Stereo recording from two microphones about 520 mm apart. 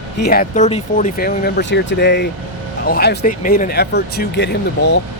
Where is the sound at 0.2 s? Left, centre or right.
Centre.